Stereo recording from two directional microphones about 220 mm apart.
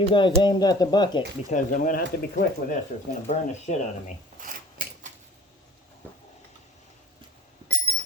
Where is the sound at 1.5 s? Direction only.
35° left (ahead or behind).